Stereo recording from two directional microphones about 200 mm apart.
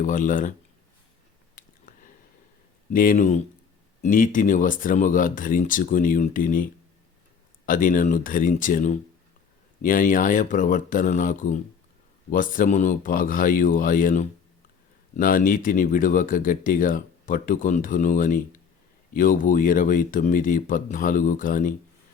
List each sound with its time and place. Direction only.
0.0 s speech: 40° left (ahead or behind)
2.9 s speech: 45° left (ahead or behind)